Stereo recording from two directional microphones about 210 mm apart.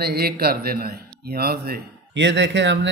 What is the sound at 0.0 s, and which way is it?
Speech, 50° right (ahead or behind).